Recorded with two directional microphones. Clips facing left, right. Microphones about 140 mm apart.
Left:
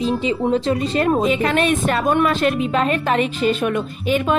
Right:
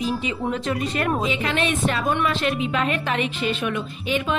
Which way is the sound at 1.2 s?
50° left (ahead or behind).